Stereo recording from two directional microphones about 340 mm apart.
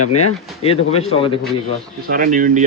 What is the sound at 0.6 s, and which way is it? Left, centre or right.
Speech, centre.